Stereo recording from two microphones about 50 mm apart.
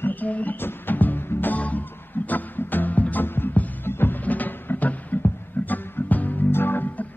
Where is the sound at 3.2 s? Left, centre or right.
Left.